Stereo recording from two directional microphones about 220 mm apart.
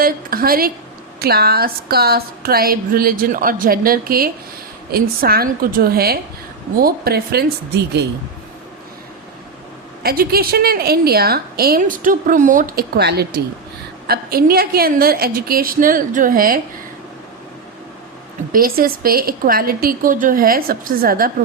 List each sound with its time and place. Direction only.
0.0 s a woman's voice: 40° right (ahead or behind)
10.0 s a woman's voice: 45° right (ahead or behind)
18.5 s a woman's voice: 40° right (ahead or behind)